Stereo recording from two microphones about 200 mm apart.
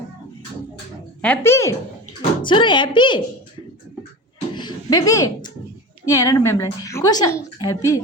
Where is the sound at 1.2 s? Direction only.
10° left (ahead or behind).